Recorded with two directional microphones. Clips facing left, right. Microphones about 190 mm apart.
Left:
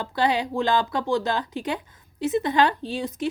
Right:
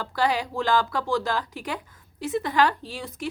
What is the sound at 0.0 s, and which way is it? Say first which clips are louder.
A woman's voice: left 2 dB; 20° left (ahead or behind).